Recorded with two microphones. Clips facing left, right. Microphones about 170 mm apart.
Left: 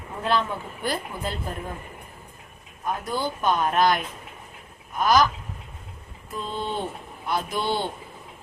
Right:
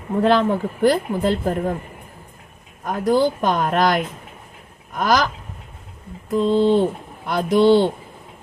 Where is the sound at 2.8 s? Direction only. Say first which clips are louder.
Right 10 dB; 75° right (ahead or behind).